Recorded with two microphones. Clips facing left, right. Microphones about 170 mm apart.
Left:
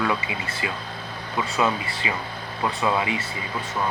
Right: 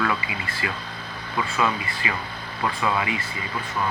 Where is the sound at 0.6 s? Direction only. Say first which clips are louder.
Even; 20° left (ahead or behind).